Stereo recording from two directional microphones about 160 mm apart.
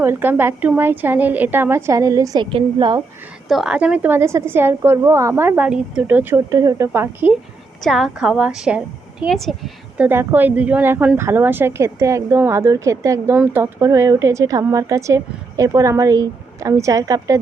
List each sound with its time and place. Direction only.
0.0 s a woman's voice: 15° right (ahead or behind)
3.5 s a woman's voice: 5° right (ahead or behind)
7.9 s a woman's voice: centre (ahead or behind)
10.1 s speech: 15° right (ahead or behind)